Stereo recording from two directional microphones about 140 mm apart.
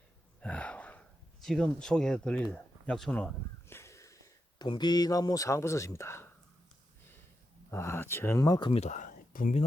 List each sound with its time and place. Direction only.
0.3 s gasp: 10° left (ahead or behind)
7.7 s speech: 20° left (ahead or behind)
8.7 s speech: 55° left (ahead or behind)